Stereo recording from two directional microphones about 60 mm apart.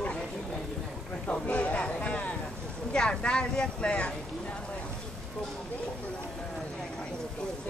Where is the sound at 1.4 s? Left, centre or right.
Left.